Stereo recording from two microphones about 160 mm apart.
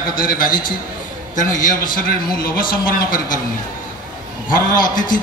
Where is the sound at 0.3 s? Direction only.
60° left (ahead or behind).